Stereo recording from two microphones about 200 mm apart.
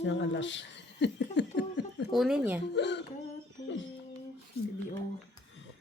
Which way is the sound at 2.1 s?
Centre (ahead or behind).